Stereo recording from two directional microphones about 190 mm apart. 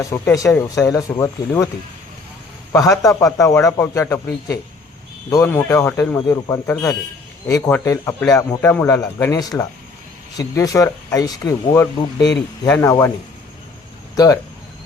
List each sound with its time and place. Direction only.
0.1 s speech: 15° left (ahead or behind)
2.7 s speech: 20° left (ahead or behind)
4.3 s speech: 55° left (ahead or behind)
5.3 s speech: 15° left (ahead or behind)